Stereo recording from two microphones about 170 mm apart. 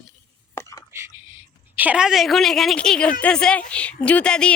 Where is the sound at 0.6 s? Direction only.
20° left (ahead or behind).